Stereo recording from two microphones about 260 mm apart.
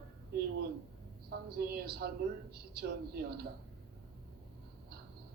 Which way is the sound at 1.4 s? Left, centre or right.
Right.